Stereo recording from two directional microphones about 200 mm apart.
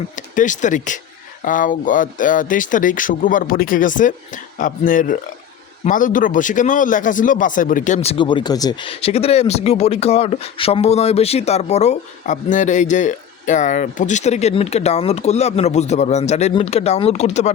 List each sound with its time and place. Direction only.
0.2 s speech: 40° left (ahead or behind)